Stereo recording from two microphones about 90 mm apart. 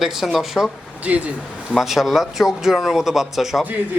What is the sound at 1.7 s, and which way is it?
A man's voice, 5° right (ahead or behind).